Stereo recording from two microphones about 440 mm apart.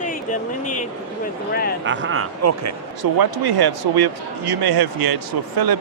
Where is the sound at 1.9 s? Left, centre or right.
Right.